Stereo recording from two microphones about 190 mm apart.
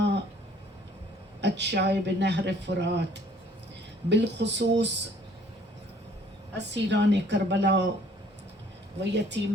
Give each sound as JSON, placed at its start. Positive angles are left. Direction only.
{"t": 1.4, "sound": "speech", "side_deg": -65}
{"t": 4.1, "sound": "speech", "side_deg": -65}
{"t": 6.5, "sound": "speech", "side_deg": -65}
{"t": 9.0, "sound": "speech", "side_deg": -65}